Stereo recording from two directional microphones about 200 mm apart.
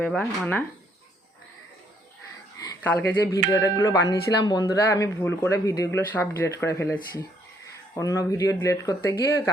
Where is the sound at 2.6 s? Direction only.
15° left (ahead or behind).